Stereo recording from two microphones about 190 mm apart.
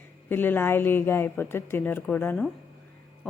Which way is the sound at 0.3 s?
10° left (ahead or behind).